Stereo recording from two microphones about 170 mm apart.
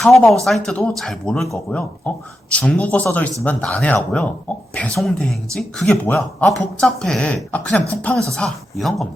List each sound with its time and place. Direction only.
0.0 s speech: centre (ahead or behind)